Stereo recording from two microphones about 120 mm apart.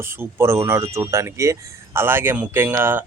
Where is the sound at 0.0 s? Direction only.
20° right (ahead or behind).